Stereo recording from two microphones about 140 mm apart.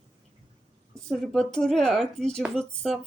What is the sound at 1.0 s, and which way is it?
Speech, centre (ahead or behind).